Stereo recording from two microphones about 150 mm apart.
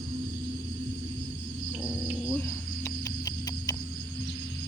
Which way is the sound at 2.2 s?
10° left (ahead or behind).